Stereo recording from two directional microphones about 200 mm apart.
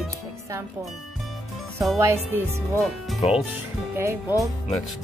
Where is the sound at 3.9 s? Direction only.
10° right (ahead or behind).